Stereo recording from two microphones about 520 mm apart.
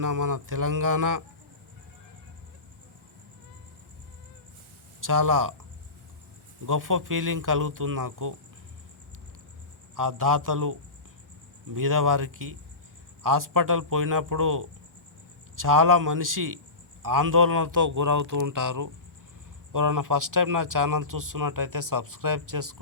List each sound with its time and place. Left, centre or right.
0.0 s speech: right
4.9 s speech: right
6.7 s speech: right
9.9 s speech: right